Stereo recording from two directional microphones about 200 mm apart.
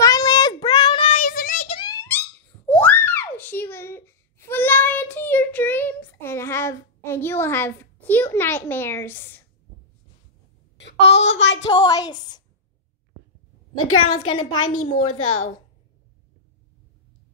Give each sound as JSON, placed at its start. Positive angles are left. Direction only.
{"t": 0.0, "sound": "child singing", "side_deg": 20}
{"t": 1.8, "sound": "wail", "side_deg": 15}
{"t": 2.7, "sound": "a sound", "side_deg": 10}
{"t": 10.8, "sound": "a woman's voice", "side_deg": 65}
{"t": 11.7, "sound": "speech", "side_deg": 20}
{"t": 14.0, "sound": "speech", "side_deg": 25}
{"t": 15.0, "sound": "a woman's voice", "side_deg": 90}